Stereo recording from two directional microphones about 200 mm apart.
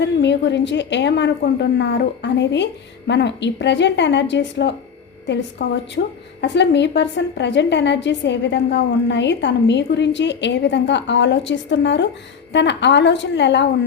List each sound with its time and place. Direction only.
0.0 s a woman's voice: 60° left (ahead or behind)